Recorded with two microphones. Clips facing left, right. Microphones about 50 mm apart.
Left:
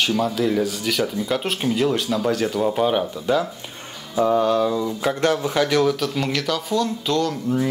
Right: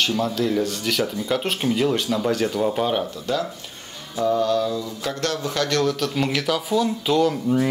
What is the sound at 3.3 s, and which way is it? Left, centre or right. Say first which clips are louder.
Speech: left 5 dB; centre.